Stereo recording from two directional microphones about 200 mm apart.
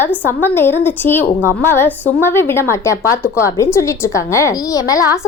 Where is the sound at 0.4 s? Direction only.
10° left (ahead or behind).